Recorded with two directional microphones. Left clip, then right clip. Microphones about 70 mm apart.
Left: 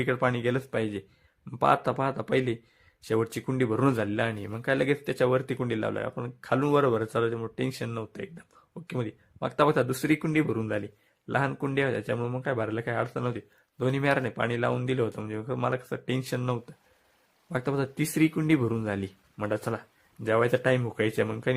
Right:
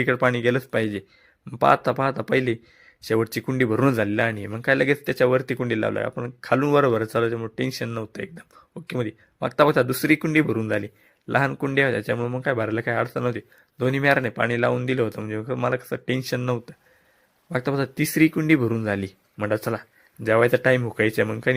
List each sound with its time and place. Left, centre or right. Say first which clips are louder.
0.0 s a man's voice: right 6 dB; right
8.2 s a man's voice: right 6 dB; right
12.1 s speech: right 5 dB; right
12.4 s a man's voice: right 6 dB; right
17.5 s a man's voice: right 5 dB; right